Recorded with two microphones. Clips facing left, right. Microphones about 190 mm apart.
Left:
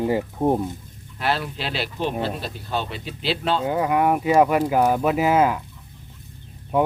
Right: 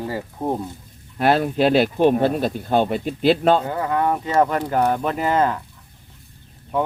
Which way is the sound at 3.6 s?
15° left (ahead or behind).